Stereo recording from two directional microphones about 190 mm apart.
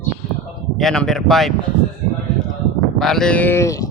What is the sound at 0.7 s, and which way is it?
Speech, 5° left (ahead or behind).